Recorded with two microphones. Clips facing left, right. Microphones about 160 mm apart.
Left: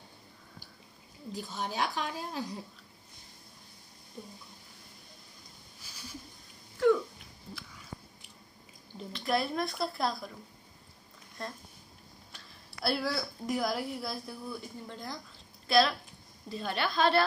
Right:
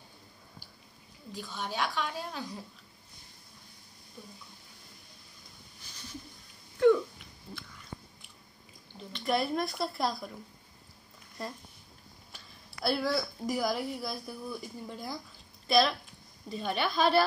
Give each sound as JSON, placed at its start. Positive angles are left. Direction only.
{"t": 1.3, "sound": "speech", "side_deg": 40}
{"t": 5.8, "sound": "a sound", "side_deg": 10}
{"t": 8.9, "sound": "a woman's voice", "side_deg": 0}
{"t": 11.4, "sound": "a woman's voice", "side_deg": 0}